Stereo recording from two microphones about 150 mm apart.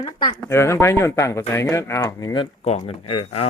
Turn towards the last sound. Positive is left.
turn(degrees=40)  # may be behind; listen again after turning